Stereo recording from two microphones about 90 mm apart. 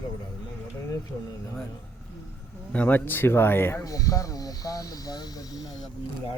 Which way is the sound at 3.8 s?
40° left (ahead or behind).